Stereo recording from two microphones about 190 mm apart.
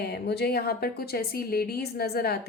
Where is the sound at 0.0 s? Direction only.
60° left (ahead or behind).